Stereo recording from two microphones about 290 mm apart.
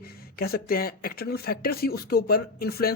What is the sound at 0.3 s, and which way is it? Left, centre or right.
Speech, left.